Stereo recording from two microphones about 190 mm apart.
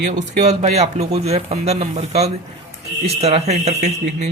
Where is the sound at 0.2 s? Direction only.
40° right (ahead or behind).